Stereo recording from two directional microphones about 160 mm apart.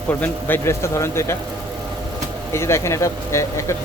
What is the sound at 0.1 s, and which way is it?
Speech, 15° left (ahead or behind).